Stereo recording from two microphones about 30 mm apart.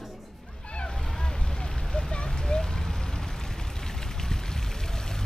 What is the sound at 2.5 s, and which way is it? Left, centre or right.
Vehicle, left.